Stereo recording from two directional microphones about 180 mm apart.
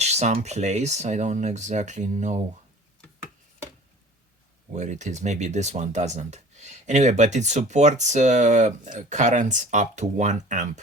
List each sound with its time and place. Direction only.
0.0 s speech: 40° right (ahead or behind)
4.7 s speech: 40° right (ahead or behind)